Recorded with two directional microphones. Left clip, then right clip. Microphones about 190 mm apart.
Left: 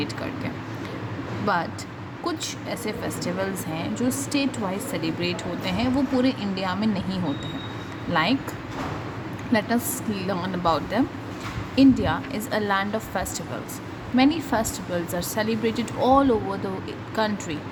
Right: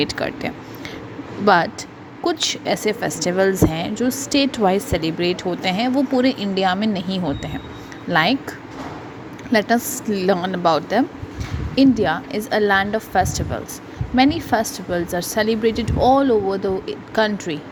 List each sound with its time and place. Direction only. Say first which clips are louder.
0.0 s a woman's voice: right 8 dB; 35° right (ahead or behind)
9.5 s speech: right 6 dB; 30° right (ahead or behind)